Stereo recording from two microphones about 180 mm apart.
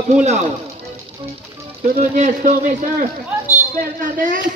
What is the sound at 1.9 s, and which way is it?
Speech, 45° right (ahead or behind).